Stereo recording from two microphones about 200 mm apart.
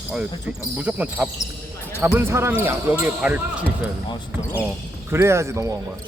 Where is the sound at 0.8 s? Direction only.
5° right (ahead or behind).